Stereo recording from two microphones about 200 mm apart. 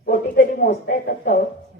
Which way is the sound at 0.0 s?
45° left (ahead or behind).